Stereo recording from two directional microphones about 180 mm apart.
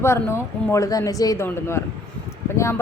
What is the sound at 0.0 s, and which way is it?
A woman's voice, 15° left (ahead or behind).